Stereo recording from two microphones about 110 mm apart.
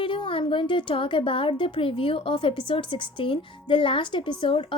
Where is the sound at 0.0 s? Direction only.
50° left (ahead or behind).